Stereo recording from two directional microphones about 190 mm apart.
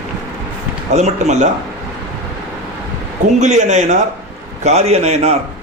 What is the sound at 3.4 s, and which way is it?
A man's voice, 40° right (ahead or behind).